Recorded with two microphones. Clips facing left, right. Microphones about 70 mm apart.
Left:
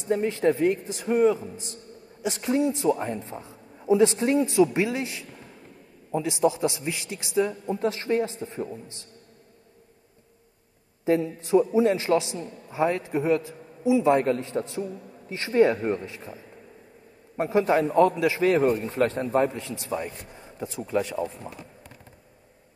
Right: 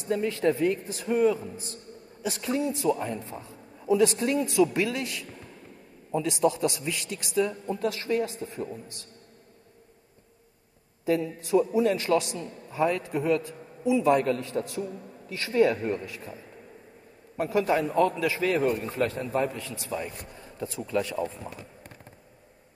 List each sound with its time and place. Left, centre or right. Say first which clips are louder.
0.1 s a man's voice: left 2 dB; left
11.1 s a man's voice: left 3 dB; left
17.4 s a man's voice: left 3 dB; left